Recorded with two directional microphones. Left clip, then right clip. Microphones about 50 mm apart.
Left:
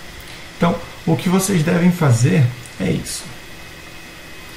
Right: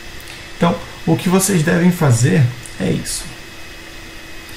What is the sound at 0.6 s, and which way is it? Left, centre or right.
Speech, centre.